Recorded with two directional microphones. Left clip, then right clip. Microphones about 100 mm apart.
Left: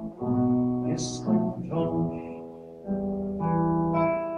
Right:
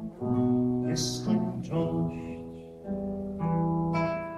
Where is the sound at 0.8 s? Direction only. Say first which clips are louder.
Left 1 dB; 20° right (ahead or behind).